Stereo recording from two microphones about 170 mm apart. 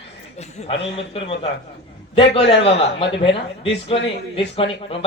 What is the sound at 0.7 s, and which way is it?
A woman's voice, 35° left (ahead or behind).